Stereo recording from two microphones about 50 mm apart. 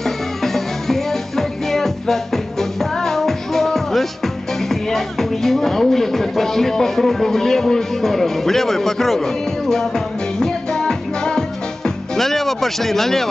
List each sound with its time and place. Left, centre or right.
0.0 s music: centre